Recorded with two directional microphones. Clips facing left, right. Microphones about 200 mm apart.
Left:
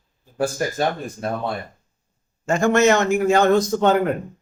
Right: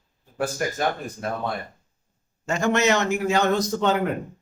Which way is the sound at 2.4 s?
50° left (ahead or behind).